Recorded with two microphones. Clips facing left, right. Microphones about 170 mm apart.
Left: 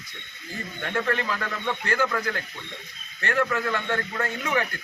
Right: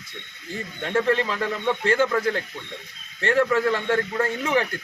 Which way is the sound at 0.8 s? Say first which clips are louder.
Right 5 dB; 25° right (ahead or behind).